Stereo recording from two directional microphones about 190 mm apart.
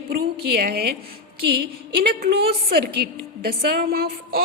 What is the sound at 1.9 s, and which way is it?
A woman's voice, 55° right (ahead or behind).